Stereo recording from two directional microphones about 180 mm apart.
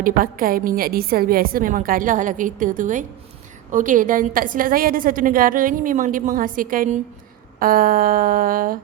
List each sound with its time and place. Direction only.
0.0 s a woman's voice: 50° right (ahead or behind)